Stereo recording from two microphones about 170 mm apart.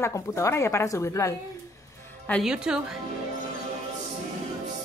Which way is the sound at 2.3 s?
Centre (ahead or behind).